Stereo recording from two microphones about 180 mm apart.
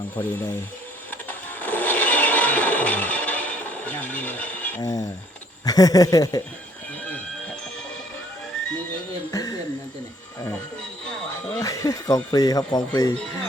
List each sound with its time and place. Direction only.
0.2 s speech: 10° left (ahead or behind)
1.3 s music: 10° left (ahead or behind)
4.8 s speech: 20° left (ahead or behind)
9.3 s a sound: 20° left (ahead or behind)
11.4 s speech: 20° left (ahead or behind)